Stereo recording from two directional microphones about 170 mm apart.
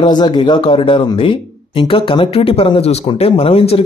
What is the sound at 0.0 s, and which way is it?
Speech, 25° left (ahead or behind).